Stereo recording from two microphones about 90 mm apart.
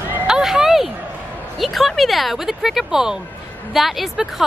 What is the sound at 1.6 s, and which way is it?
A woman's voice, centre (ahead or behind).